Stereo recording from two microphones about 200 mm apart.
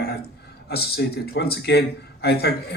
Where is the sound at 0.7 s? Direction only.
55° left (ahead or behind).